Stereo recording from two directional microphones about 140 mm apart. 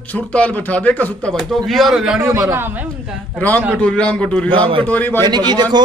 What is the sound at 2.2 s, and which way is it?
Speech, 20° right (ahead or behind).